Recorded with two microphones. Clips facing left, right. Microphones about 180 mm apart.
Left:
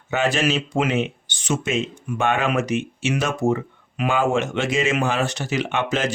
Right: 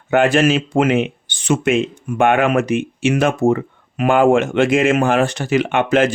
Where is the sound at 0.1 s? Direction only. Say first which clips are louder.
Right 7 dB; 55° right (ahead or behind).